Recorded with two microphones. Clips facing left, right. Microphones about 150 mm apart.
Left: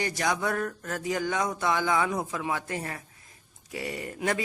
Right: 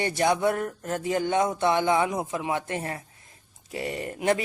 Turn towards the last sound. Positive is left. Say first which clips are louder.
# right 5 dB
turn(degrees=-25)  # may be behind; listen again after turning